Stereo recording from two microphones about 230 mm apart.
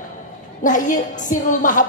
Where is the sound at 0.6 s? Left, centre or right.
Left.